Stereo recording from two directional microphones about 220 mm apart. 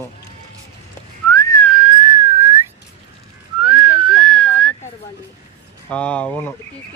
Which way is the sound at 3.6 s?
5° right (ahead or behind).